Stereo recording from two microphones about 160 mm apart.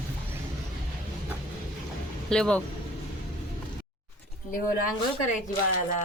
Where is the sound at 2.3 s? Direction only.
5° left (ahead or behind).